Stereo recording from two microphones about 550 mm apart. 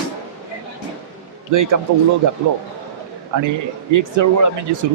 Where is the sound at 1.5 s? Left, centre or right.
Right.